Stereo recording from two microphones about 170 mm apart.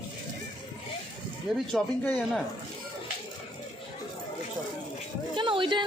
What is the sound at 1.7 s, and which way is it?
Speech, 5° left (ahead or behind).